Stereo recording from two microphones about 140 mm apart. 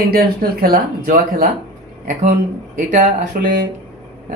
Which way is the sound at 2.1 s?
65° right (ahead or behind).